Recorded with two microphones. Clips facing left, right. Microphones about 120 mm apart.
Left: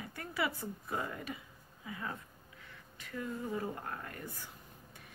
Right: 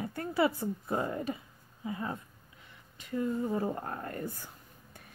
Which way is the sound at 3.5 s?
35° right (ahead or behind).